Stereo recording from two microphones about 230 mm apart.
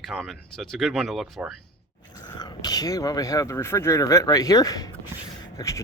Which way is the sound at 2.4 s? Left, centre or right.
Centre.